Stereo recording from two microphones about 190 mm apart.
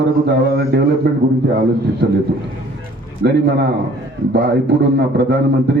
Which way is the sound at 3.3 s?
65° right (ahead or behind).